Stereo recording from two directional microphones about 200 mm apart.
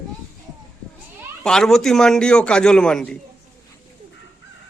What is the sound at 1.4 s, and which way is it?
A man's voice, 5° left (ahead or behind).